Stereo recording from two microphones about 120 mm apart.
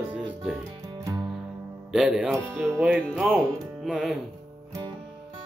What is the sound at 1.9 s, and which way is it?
Speech, 5° right (ahead or behind).